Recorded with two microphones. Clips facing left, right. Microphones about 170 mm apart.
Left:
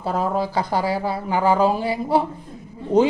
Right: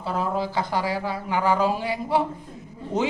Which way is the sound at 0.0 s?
45° left (ahead or behind).